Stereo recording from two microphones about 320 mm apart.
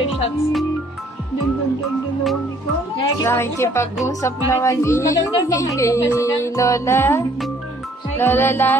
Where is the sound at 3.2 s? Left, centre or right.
Centre.